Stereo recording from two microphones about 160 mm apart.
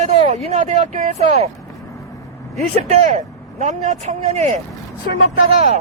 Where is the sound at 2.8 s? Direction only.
50° right (ahead or behind).